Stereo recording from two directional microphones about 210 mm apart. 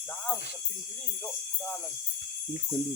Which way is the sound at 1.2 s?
10° left (ahead or behind).